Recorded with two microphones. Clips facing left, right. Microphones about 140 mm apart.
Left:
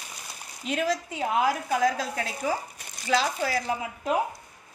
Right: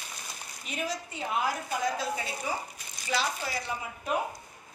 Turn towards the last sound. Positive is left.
turn(degrees=90)